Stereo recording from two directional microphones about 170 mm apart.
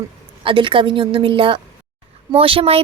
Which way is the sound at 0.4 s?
30° right (ahead or behind).